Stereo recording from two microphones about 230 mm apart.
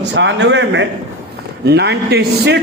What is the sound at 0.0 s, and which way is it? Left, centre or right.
A man's voice, right.